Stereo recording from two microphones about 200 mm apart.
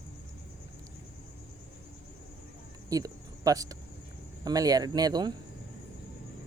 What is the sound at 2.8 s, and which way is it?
Cricket, 15° right (ahead or behind).